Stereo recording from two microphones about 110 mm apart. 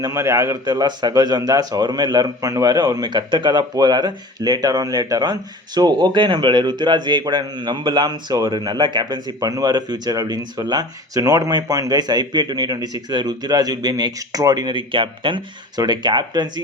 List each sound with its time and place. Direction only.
0.1 s a man's voice: 25° right (ahead or behind)
0.6 s speech: 40° right (ahead or behind)